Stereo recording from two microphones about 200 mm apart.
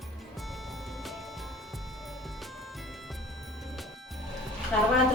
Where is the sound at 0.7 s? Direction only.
Centre (ahead or behind).